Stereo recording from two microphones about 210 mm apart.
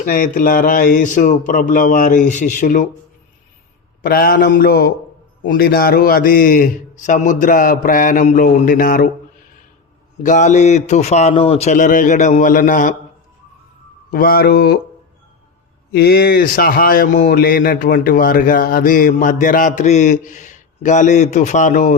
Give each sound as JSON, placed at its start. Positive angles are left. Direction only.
{"t": 0.0, "sound": "a man's voice", "side_deg": 40}
{"t": 4.0, "sound": "a man's voice", "side_deg": 45}
{"t": 10.2, "sound": "a man's voice", "side_deg": 35}
{"t": 14.1, "sound": "a man's voice", "side_deg": 45}
{"t": 15.9, "sound": "a man's voice", "side_deg": 50}